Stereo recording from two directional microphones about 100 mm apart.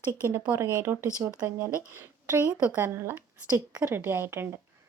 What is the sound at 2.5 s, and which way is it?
Speech, 10° right (ahead or behind).